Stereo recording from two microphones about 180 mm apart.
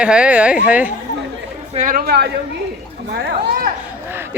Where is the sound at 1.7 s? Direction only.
45° right (ahead or behind).